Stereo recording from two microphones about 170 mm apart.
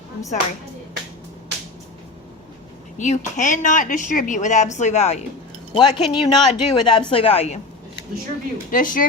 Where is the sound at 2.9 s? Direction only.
45° left (ahead or behind).